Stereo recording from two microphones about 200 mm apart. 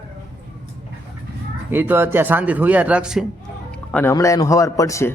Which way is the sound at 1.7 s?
10° right (ahead or behind).